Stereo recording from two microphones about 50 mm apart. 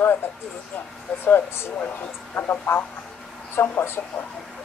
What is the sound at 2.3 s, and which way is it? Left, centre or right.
Speech, left.